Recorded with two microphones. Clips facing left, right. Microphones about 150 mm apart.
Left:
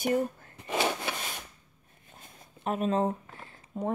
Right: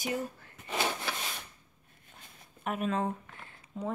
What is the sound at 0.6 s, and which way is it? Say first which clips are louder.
Wood: left 4 dB; 20° left (ahead or behind).